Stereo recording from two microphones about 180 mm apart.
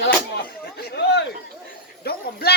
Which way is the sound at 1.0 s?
65° left (ahead or behind).